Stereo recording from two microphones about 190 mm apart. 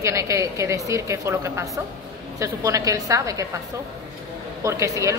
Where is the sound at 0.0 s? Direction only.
15° right (ahead or behind).